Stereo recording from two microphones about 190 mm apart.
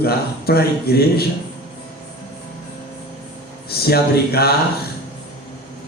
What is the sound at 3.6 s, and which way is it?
Speech, 55° left (ahead or behind).